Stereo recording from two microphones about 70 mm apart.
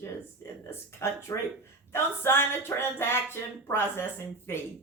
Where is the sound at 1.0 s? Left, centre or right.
Left.